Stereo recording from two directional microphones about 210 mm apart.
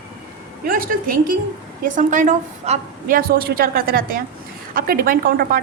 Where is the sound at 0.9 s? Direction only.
40° right (ahead or behind).